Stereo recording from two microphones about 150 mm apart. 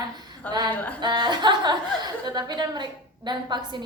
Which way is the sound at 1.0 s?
30° right (ahead or behind).